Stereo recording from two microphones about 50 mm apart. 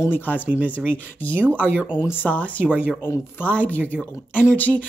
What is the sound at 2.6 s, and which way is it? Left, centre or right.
Speech, right.